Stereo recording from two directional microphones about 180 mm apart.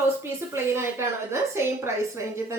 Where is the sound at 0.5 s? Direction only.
15° right (ahead or behind).